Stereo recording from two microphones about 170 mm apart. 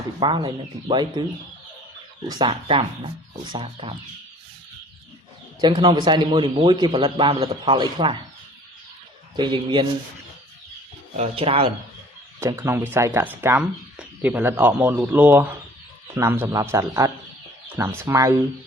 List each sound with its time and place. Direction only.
0.2 s a man's voice: 30° right (ahead or behind)
2.2 s a man's voice: 25° right (ahead or behind)
5.5 s a man's voice: 25° right (ahead or behind)
9.3 s a man's voice: 25° right (ahead or behind)
11.2 s speech: 35° right (ahead or behind)
12.4 s speech: 15° right (ahead or behind)